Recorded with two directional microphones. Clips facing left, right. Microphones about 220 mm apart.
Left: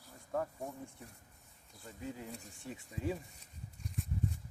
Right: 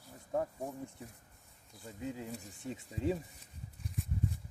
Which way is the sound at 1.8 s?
20° right (ahead or behind).